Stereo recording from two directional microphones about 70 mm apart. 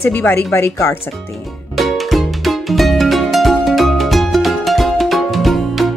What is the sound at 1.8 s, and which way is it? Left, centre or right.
Music, centre.